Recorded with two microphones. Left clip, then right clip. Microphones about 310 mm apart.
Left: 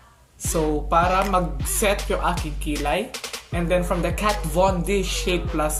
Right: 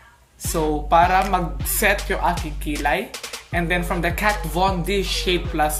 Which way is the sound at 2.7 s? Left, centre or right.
Right.